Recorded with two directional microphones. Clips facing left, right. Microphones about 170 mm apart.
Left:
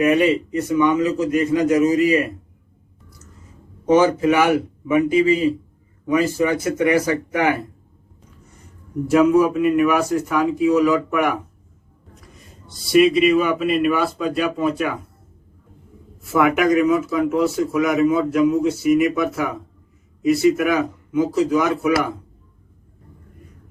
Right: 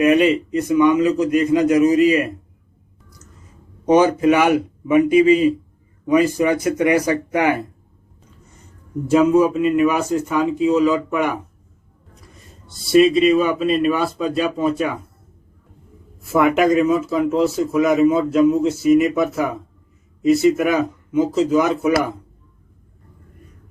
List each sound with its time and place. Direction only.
0.0 s speech: 20° right (ahead or behind)
3.8 s speech: 20° right (ahead or behind)
9.0 s speech: 25° right (ahead or behind)
12.6 s speech: 25° right (ahead or behind)
16.3 s speech: 25° right (ahead or behind)